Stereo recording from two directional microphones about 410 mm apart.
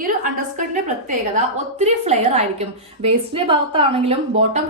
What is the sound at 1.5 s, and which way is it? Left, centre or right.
A woman's voice, centre.